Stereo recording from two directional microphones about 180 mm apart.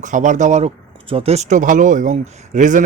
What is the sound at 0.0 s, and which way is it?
Speech, 45° right (ahead or behind).